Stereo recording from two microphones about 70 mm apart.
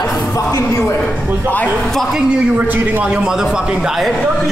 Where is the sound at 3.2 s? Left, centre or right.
Centre.